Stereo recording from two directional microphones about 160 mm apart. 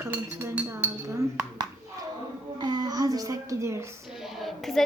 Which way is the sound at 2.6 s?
25° right (ahead or behind).